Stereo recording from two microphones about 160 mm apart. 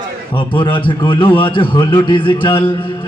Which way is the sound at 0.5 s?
30° left (ahead or behind).